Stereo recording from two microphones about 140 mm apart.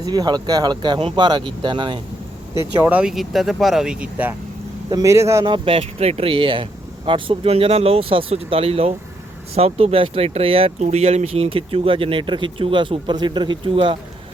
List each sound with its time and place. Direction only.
0.0 s speech: 30° right (ahead or behind)
2.6 s speech: 15° right (ahead or behind)
4.9 s speech: 25° right (ahead or behind)
5.5 s speech: 40° right (ahead or behind)